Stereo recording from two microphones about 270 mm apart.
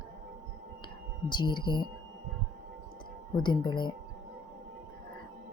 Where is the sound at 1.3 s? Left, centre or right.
Centre.